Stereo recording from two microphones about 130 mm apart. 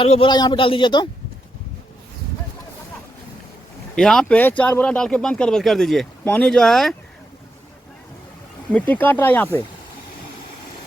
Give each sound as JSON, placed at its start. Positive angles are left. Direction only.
{"t": 0.0, "sound": "a man's voice", "side_deg": 40}
{"t": 3.9, "sound": "speech", "side_deg": 5}
{"t": 8.7, "sound": "speech", "side_deg": 15}